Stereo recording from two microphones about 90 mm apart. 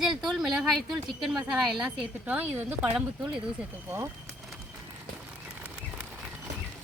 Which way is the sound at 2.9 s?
10° right (ahead or behind).